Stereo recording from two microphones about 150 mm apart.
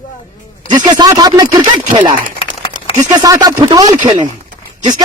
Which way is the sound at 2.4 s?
60° right (ahead or behind).